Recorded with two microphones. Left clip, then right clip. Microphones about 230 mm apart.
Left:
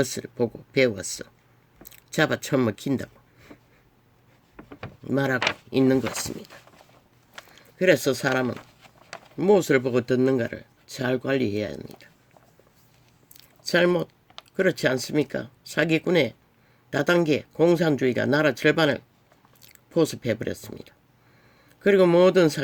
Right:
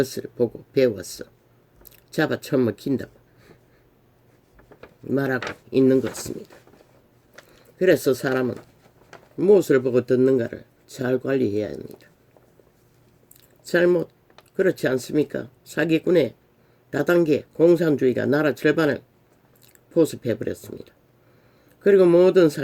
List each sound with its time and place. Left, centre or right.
0.0 s speech: left
5.0 s speech: left
7.3 s speech: left
13.7 s speech: left